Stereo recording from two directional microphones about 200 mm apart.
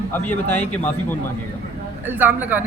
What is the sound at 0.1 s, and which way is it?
Speech, 10° left (ahead or behind).